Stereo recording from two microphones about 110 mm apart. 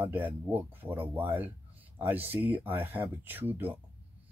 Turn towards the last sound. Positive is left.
turn(degrees=-15)  # may be behind; listen again after turning